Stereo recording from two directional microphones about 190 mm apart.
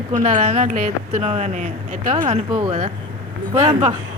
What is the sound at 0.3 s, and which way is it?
Speech, 35° right (ahead or behind).